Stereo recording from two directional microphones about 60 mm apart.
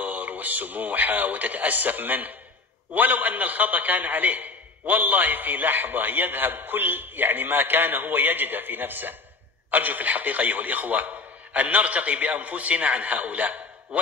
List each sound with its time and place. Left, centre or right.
0.0 s a man's voice: right